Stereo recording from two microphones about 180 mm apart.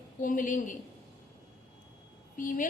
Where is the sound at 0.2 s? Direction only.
45° left (ahead or behind).